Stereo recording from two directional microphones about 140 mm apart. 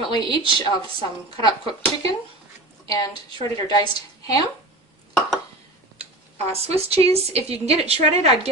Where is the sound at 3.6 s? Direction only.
30° left (ahead or behind).